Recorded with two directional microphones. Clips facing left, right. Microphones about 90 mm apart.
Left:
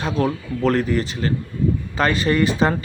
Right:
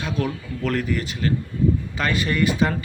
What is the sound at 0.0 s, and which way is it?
A man's voice, 35° left (ahead or behind).